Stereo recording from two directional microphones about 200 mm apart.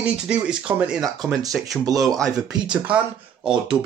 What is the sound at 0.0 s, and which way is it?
Speech, 5° right (ahead or behind).